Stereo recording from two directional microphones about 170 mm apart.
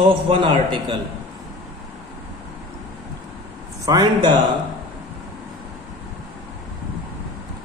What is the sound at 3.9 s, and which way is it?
Speech, 20° right (ahead or behind).